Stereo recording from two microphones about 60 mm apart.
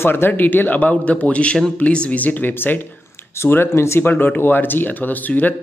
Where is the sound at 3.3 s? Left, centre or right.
Left.